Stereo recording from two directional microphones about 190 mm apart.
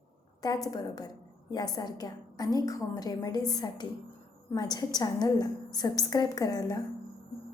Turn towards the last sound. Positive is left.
turn(degrees=20)  # may be behind; listen again after turning